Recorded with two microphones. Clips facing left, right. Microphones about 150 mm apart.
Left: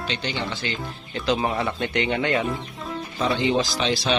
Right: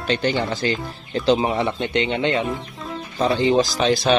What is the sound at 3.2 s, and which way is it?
Speech, 35° right (ahead or behind).